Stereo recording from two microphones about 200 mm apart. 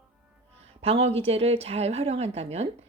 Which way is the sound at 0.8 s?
30° right (ahead or behind).